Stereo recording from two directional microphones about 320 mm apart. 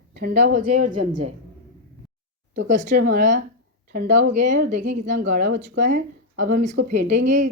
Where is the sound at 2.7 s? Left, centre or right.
Right.